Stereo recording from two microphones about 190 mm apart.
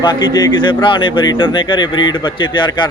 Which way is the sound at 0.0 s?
25° left (ahead or behind).